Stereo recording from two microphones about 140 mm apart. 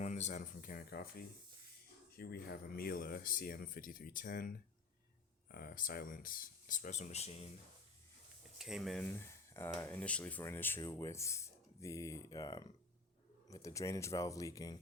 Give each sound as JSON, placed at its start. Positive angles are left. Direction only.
{"t": 0.0, "sound": "speech", "side_deg": 55}
{"t": 2.1, "sound": "speech", "side_deg": 90}
{"t": 8.5, "sound": "speech", "side_deg": -5}
{"t": 9.0, "sound": "speech", "side_deg": 15}